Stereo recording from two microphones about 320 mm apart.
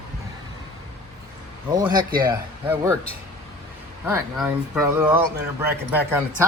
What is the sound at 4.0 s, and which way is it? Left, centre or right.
Speech, centre.